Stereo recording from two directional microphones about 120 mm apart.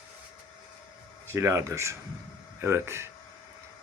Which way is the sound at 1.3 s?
20° right (ahead or behind).